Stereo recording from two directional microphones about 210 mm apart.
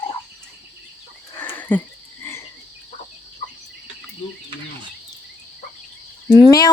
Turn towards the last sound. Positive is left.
turn(degrees=20)  # may be behind; listen again after turning